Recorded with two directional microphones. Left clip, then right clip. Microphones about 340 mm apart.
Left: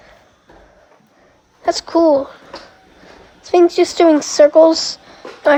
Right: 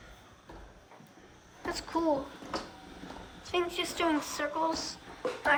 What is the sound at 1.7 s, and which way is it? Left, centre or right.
Speech, centre.